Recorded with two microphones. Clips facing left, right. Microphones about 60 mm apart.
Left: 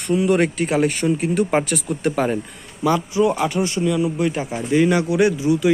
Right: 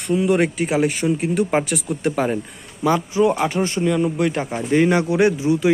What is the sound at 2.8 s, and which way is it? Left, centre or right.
Speech, right.